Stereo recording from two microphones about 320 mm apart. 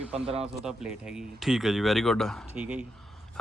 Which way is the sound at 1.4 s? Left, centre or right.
Centre.